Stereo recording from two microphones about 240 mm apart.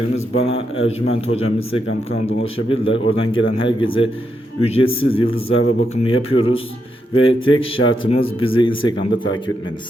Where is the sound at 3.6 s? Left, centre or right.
Left.